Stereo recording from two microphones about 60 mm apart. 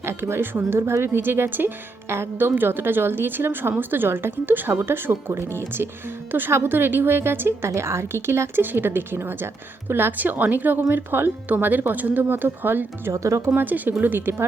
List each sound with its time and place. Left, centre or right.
0.0 s speech: right
13.1 s speech: right
13.6 s speech: right